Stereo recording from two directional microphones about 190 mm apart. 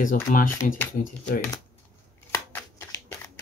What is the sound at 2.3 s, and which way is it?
Shuffling cards, 15° left (ahead or behind).